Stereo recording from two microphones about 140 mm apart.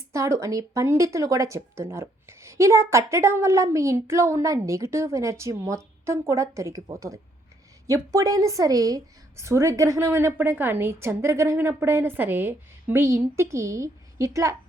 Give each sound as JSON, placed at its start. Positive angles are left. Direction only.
{"t": 0.1, "sound": "speech", "side_deg": -20}